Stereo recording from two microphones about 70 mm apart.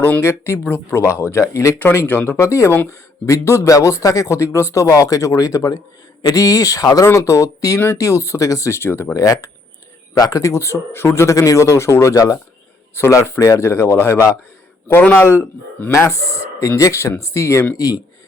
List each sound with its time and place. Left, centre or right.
0.2 s speech: left
1.8 s speech: left
2.4 s speech: left
7.1 s speech: left
9.1 s speech: left
12.1 s speech: left
13.0 s speech: left
17.7 s speech: left